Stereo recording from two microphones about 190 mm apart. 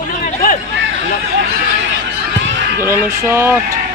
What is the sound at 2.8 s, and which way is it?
Speech, 10° right (ahead or behind).